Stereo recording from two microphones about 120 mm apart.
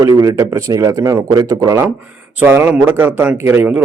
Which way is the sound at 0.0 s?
30° right (ahead or behind).